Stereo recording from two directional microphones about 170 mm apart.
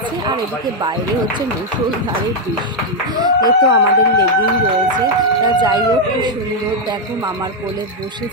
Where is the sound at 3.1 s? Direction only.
25° right (ahead or behind).